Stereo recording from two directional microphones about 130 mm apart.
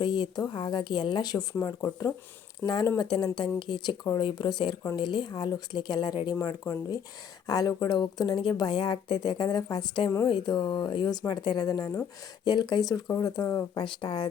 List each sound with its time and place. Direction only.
0.0 s speech: 35° left (ahead or behind); by 2.8 s 20° left (ahead or behind)
3.0 s speech: 30° left (ahead or behind)
6.3 s speech: 20° left (ahead or behind)
13.8 s speech: 40° left (ahead or behind)